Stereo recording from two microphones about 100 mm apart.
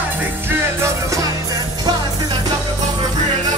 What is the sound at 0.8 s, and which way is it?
Music, 30° right (ahead or behind).